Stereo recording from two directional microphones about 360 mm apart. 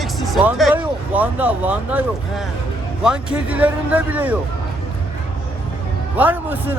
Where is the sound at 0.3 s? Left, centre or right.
Centre.